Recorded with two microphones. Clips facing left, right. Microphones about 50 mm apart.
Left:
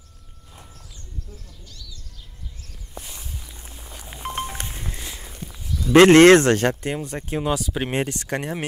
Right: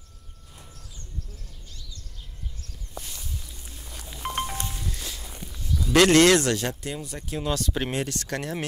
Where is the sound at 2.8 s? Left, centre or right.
Centre.